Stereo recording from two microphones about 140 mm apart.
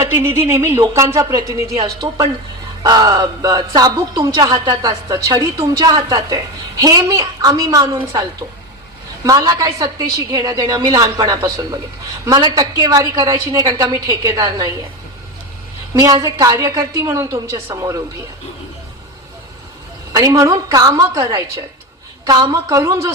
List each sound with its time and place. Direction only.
0.0 s speech: 15° right (ahead or behind)
9.2 s speech: 25° right (ahead or behind)
15.9 s speech: 25° right (ahead or behind)
20.1 s speech: 25° right (ahead or behind)